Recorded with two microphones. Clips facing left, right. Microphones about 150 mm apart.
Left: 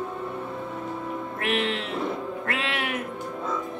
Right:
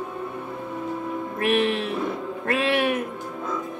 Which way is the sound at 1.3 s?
30° right (ahead or behind).